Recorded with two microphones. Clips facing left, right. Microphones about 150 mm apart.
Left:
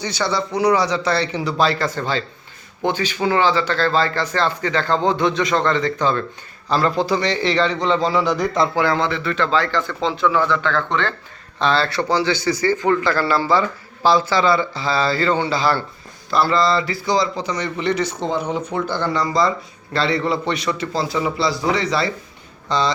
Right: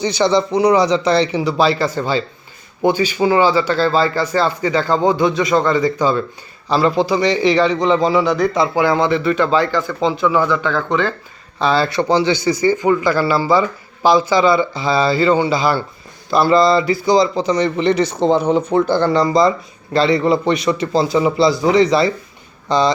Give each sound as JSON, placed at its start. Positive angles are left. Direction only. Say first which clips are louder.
{"t": 0.0, "sound": "a man's voice", "louder": "right 7 dB", "side_deg": -20}